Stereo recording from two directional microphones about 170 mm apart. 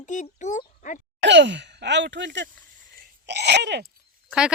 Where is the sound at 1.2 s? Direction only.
90° right.